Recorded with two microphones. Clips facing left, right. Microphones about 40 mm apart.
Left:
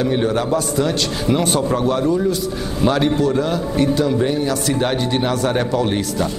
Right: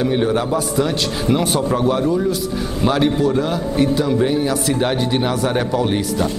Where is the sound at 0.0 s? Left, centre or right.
Centre.